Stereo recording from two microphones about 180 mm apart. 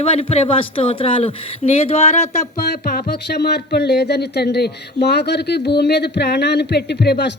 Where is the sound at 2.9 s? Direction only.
60° left (ahead or behind).